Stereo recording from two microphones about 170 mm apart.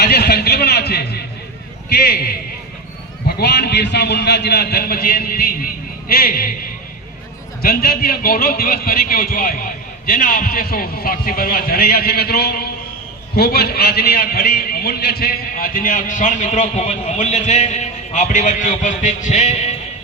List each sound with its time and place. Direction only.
0.0 s a sound: 70° left (ahead or behind)
1.9 s a man's voice: 65° left (ahead or behind)
7.6 s a man's voice: 60° left (ahead or behind); by 19.7 s 40° left (ahead or behind)